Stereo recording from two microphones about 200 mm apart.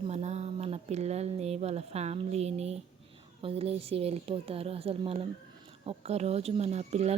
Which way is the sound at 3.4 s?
30° right (ahead or behind).